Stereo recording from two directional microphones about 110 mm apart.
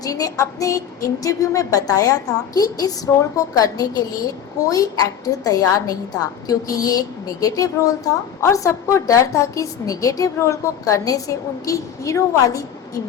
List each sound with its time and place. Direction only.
0.0 s a woman's voice: 35° left (ahead or behind)